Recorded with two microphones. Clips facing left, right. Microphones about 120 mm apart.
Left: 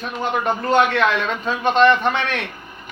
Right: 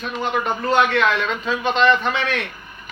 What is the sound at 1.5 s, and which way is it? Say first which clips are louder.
Speech: left 3 dB; 50° left (ahead or behind).